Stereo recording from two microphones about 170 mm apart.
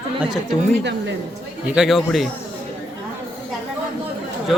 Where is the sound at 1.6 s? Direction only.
Centre (ahead or behind).